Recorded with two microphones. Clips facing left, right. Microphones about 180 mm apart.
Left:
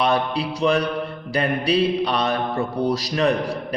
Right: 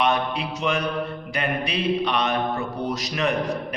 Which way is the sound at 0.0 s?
35° left (ahead or behind).